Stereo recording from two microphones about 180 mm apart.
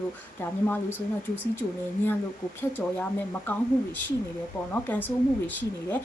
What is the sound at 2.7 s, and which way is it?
A woman's voice, 10° left (ahead or behind).